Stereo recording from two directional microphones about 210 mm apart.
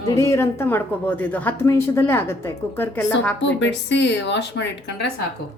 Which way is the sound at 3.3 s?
55° left (ahead or behind).